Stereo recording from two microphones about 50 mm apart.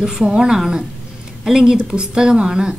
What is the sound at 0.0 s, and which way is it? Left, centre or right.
A woman's voice, centre.